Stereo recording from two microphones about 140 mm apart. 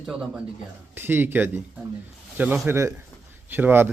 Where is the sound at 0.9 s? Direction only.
15° right (ahead or behind).